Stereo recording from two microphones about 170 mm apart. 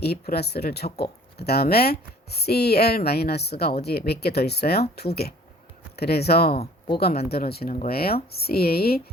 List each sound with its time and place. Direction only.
0.0 s speech: 70° left (ahead or behind)